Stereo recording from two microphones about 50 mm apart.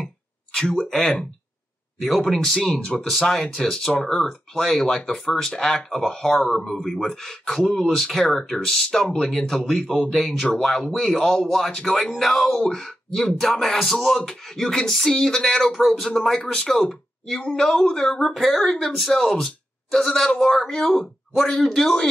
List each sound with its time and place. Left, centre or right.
0.0 s a sound: centre
0.8 s speech: centre
2.2 s speech: centre
10.0 s speech: centre
10.4 s speech: centre